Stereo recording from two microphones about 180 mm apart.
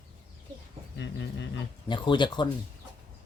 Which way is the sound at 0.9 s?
85° left.